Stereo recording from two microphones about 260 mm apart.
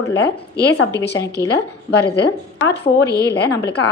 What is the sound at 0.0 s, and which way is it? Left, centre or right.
A woman's voice, left.